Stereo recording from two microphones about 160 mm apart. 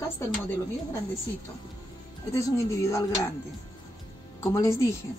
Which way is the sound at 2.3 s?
20° left (ahead or behind).